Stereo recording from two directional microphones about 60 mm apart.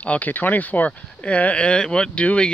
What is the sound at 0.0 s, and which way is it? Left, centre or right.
Speech, left.